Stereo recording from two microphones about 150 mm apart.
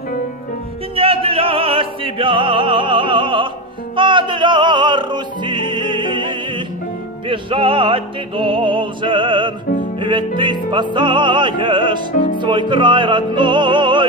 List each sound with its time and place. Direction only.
0.9 s music: 40° right (ahead or behind)